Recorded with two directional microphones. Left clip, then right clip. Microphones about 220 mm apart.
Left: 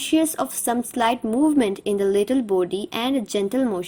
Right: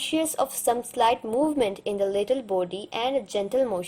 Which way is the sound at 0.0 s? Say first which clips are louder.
Left 4 dB; 25° left (ahead or behind).